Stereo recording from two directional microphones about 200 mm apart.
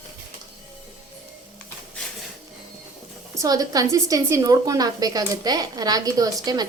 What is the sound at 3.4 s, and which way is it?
A woman's voice, 20° right (ahead or behind).